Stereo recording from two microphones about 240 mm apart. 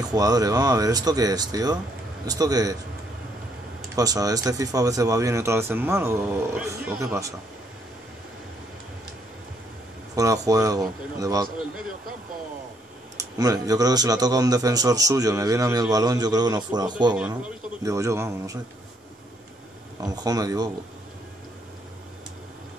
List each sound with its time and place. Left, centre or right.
0.1 s a man's voice: centre
3.9 s a man's voice: centre
10.1 s a man's voice: centre
13.2 s a man's voice: centre
20.0 s a man's voice: centre